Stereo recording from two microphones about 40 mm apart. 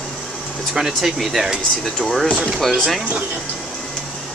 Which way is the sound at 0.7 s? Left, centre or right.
Centre.